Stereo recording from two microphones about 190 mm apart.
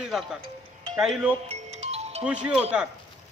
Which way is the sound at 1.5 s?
35° right (ahead or behind).